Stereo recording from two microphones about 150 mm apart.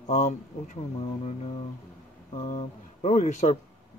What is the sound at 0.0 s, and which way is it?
Speech, 50° left (ahead or behind).